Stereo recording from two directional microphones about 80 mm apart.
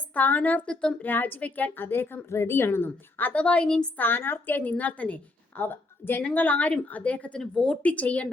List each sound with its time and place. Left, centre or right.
0.1 s a woman's voice: left
1.0 s a woman's voice: left
4.0 s a woman's voice: left